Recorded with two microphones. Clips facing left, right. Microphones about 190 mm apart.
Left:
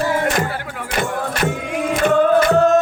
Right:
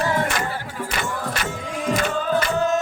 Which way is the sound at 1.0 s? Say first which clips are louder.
Left 8 dB; 55° left (ahead or behind).